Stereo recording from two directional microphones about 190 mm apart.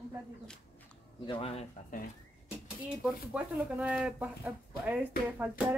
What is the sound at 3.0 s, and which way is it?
Speech, 5° right (ahead or behind).